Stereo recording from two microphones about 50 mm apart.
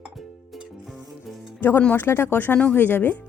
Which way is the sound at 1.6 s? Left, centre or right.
Left.